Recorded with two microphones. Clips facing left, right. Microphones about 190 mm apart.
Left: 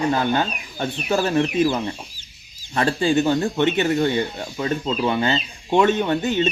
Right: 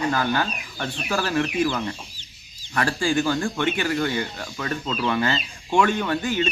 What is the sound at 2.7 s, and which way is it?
Speech, 25° left (ahead or behind).